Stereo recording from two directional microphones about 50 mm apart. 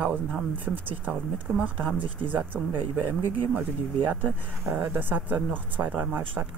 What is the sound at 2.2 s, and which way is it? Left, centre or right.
Speech, right.